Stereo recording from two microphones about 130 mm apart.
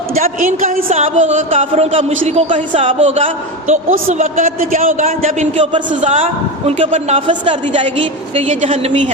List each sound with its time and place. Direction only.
0.1 s a woman's voice: 90° right
0.9 s speech: 60° right (ahead or behind); by 5.0 s 85° right
5.2 s speech: 60° right (ahead or behind)
8.4 s speech: 65° right (ahead or behind)